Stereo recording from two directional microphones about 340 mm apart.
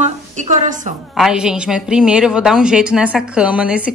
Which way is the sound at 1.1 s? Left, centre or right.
Centre.